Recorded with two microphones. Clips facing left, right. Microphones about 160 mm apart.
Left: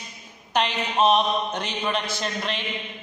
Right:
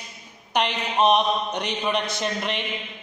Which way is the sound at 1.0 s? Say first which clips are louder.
Right 1 dB; 15° right (ahead or behind).